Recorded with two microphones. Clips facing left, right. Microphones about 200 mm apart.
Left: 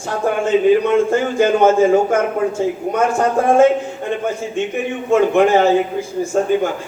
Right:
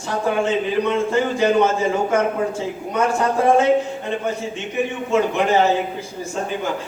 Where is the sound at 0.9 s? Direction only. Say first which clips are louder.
Left 4 dB; 50° left (ahead or behind).